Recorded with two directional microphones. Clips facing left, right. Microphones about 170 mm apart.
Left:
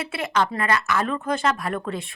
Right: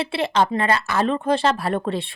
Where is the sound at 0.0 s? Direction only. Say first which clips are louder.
Right 4 dB; 30° right (ahead or behind).